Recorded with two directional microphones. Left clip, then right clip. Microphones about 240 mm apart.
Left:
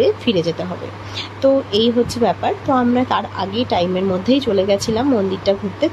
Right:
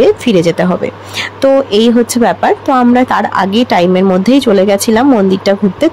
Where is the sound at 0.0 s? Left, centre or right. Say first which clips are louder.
Right 8 dB; right.